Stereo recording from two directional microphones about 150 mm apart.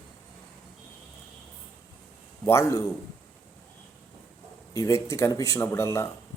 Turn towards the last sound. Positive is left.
turn(degrees=20)  # may be behind; listen again after turning